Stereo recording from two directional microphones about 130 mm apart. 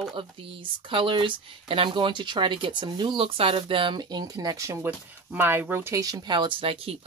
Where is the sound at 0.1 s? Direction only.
40° right (ahead or behind).